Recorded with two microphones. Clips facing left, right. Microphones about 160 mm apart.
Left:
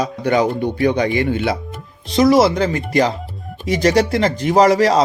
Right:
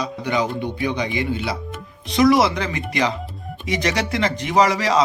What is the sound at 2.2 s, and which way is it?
A man's voice, 40° left (ahead or behind).